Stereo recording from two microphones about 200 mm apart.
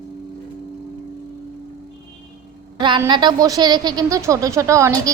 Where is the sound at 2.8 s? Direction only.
20° right (ahead or behind).